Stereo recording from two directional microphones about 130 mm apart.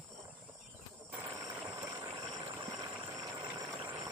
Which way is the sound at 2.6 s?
30° right (ahead or behind).